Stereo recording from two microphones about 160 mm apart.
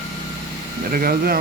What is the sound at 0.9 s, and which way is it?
Speech, 65° right (ahead or behind).